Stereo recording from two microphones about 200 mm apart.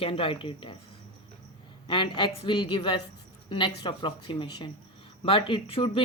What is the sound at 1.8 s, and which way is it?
Speech, 25° left (ahead or behind).